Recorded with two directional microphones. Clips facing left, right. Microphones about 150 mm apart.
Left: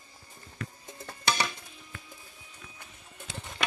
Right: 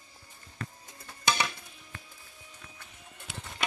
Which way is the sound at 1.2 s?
15° right (ahead or behind).